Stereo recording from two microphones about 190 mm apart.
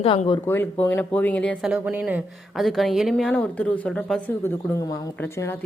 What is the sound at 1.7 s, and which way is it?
Speech, 5° right (ahead or behind).